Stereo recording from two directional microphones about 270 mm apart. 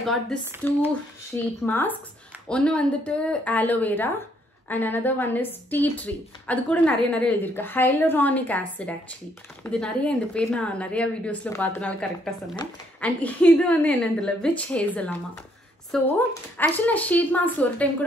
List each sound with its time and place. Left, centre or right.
0.0 s a woman's voice: centre